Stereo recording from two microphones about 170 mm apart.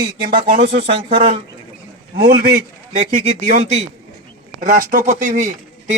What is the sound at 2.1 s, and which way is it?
Speech, 65° right (ahead or behind).